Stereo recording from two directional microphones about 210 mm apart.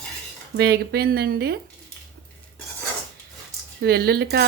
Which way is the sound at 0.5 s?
50° right (ahead or behind).